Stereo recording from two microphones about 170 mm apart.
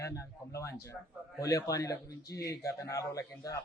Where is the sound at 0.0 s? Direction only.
15° left (ahead or behind).